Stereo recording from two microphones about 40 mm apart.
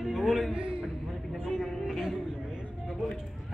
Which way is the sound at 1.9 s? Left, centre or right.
Centre.